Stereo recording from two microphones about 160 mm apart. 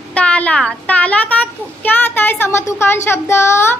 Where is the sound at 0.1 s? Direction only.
5° left (ahead or behind).